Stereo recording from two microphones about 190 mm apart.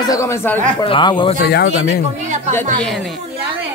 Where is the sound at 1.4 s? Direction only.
60° left (ahead or behind).